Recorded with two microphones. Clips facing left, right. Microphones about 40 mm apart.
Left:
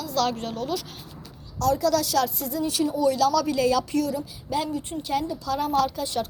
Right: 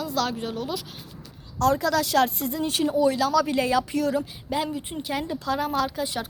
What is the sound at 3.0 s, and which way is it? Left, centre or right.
A woman's voice, right.